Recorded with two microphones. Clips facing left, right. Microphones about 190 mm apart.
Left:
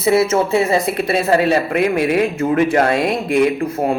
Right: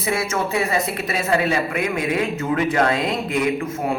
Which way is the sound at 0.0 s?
25° left (ahead or behind).